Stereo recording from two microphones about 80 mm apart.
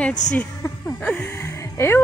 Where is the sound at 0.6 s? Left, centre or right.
Left.